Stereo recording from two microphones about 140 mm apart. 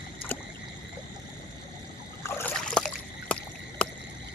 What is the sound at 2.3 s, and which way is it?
Trickle, 15° left (ahead or behind).